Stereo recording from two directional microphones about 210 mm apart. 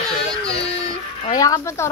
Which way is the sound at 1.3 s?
15° left (ahead or behind).